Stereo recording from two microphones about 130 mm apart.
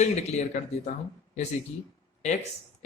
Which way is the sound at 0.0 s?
65° left (ahead or behind).